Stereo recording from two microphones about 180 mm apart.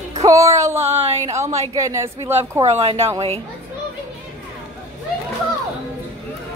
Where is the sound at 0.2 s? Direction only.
20° right (ahead or behind).